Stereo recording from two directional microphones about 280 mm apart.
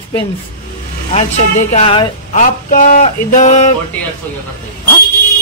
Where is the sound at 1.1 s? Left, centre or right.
Left.